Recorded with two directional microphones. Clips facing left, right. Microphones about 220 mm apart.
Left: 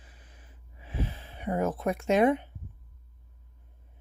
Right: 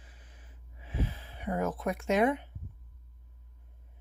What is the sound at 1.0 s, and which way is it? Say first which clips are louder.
Speech: left 2 dB; 25° left (ahead or behind).